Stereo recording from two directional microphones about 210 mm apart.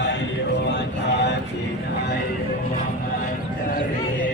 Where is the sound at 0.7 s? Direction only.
55° left (ahead or behind).